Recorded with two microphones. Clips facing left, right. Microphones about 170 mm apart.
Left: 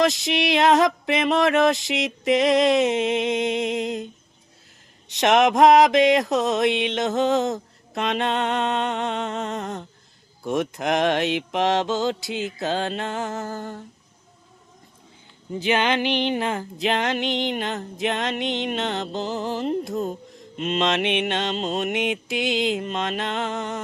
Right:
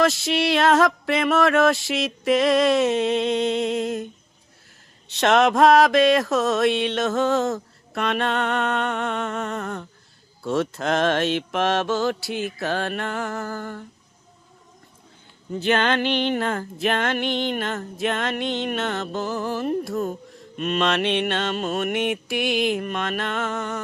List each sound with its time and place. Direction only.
0.0 s mantra: 20° left (ahead or behind)
15.5 s mantra: 15° left (ahead or behind)